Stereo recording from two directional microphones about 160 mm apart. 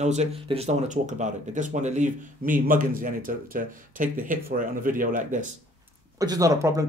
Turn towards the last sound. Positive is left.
turn(degrees=-20)  # may be behind; listen again after turning